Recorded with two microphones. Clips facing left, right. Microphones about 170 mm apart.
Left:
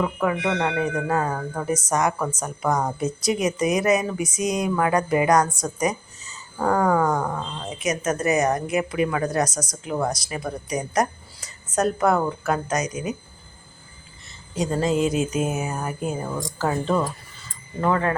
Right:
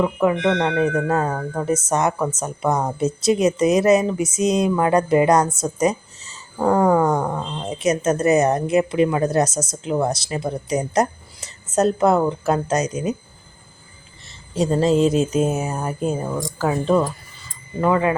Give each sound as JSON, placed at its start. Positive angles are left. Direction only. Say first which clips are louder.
{"t": 0.0, "sound": "a woman's voice", "louder": "right 5 dB", "side_deg": -20}
{"t": 0.3, "sound": "speech", "louder": "right 5 dB", "side_deg": 5}
{"t": 1.3, "sound": "a sound", "louder": "right 3 dB", "side_deg": -10}
{"t": 1.6, "sound": "a woman's voice", "louder": "right 3 dB", "side_deg": -25}
{"t": 2.6, "sound": "speech", "louder": "right 2 dB", "side_deg": -5}
{"t": 3.0, "sound": "a woman's voice", "louder": "right 5 dB", "side_deg": -25}
{"t": 6.8, "sound": "a sound", "louder": "right 4 dB", "side_deg": -10}
{"t": 7.7, "sound": "a woman's voice", "louder": "right 6 dB", "side_deg": -30}
{"t": 14.5, "sound": "a woman's voice", "louder": "right 5 dB", "side_deg": -30}
{"t": 16.6, "sound": "a sound", "louder": "right 4 dB", "side_deg": -10}